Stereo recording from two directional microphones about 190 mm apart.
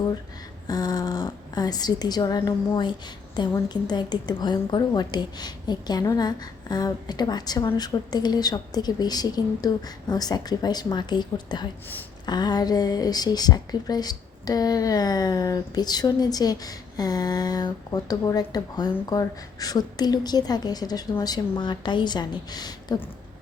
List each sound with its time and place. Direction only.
0.7 s speech: 20° left (ahead or behind)